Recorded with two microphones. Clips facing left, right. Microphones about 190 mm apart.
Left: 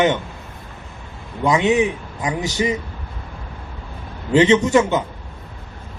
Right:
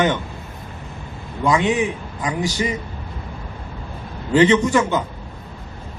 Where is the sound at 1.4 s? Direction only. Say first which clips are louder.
Left 2 dB; 20° left (ahead or behind).